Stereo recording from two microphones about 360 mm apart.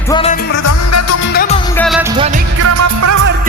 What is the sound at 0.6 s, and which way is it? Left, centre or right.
Music, left.